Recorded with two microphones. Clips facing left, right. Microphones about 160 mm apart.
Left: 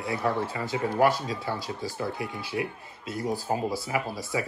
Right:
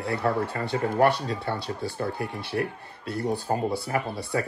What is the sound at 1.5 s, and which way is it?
Speech, 65° right (ahead or behind).